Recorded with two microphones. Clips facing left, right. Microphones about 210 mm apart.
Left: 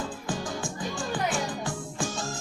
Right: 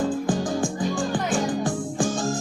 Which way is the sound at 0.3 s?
50° right (ahead or behind).